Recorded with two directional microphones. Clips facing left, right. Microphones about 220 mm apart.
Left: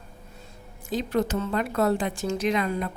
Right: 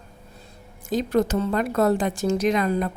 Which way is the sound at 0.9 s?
45° right (ahead or behind).